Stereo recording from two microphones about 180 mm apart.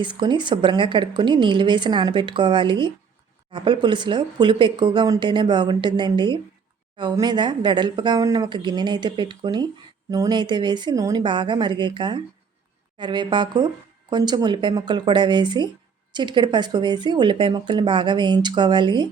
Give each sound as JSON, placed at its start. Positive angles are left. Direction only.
{"t": 0.0, "sound": "speech", "side_deg": -25}